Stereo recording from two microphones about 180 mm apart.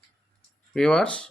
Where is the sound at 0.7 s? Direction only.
5° left (ahead or behind).